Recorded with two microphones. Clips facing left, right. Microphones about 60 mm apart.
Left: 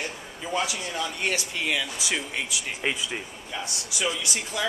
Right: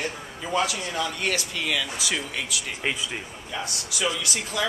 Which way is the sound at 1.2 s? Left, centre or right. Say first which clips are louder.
Right 1 dB; centre.